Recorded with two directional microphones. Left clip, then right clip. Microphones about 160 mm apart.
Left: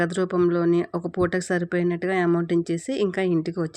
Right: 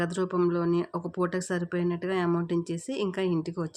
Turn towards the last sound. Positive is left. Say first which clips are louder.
# left 5 dB
turn(degrees=30)  # may be behind; listen again after turning